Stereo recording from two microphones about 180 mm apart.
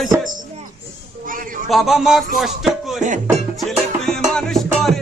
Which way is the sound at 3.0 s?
40° right (ahead or behind).